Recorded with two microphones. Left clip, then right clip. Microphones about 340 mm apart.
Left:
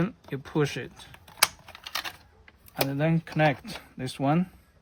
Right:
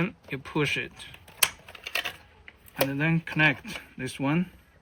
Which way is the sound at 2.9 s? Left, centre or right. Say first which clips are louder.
Left 1 dB; left.